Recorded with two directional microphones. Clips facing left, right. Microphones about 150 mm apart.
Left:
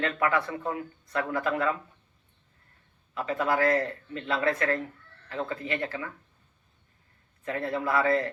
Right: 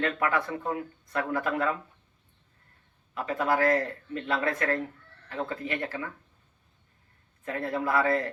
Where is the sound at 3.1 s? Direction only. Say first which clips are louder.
Even; 45° right (ahead or behind).